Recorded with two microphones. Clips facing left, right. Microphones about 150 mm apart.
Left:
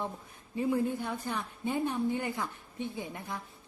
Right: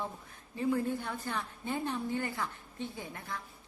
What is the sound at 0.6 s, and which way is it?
A woman's voice, 15° left (ahead or behind).